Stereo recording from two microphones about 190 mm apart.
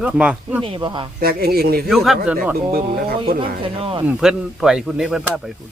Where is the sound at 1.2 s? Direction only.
55° right (ahead or behind).